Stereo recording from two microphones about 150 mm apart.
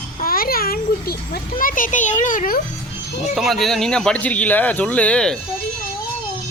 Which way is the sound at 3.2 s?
Centre (ahead or behind).